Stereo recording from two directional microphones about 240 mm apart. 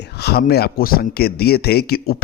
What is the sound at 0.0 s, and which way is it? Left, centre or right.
A man's voice, left.